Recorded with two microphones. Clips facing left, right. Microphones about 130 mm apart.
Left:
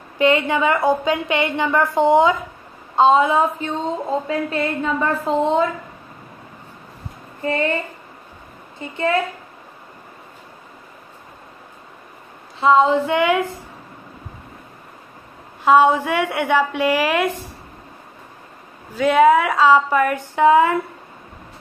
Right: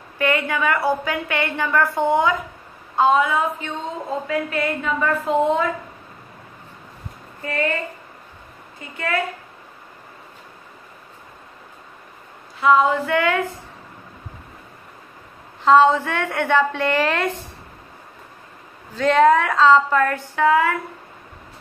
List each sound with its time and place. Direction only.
0.2 s a woman's voice: 20° left (ahead or behind)
7.4 s a woman's voice: 25° left (ahead or behind)
8.7 s a woman's voice: 25° left (ahead or behind)
12.5 s a woman's voice: 25° left (ahead or behind)
15.6 s speech: 10° left (ahead or behind)
18.9 s speech: 10° left (ahead or behind)